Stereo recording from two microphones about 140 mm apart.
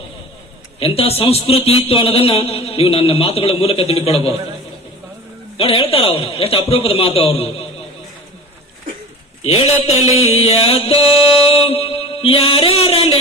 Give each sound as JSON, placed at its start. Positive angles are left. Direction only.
{"t": 0.8, "sound": "a man's voice", "side_deg": 45}
{"t": 5.5, "sound": "a man's voice", "side_deg": 40}
{"t": 9.5, "sound": "a man's voice", "side_deg": 45}